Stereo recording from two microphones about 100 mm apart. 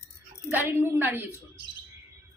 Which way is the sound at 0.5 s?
20° right (ahead or behind).